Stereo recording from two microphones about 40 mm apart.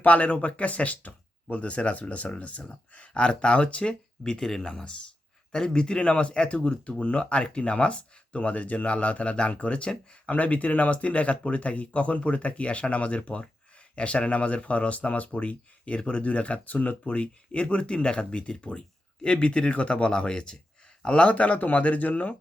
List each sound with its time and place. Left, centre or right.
0.0 s speech: left
17.1 s speech: left
21.1 s speech: left